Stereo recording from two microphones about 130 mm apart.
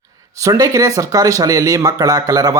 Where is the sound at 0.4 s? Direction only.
25° right (ahead or behind).